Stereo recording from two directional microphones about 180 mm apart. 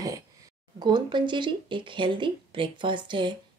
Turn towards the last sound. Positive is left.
turn(degrees=-25)  # may be behind; listen again after turning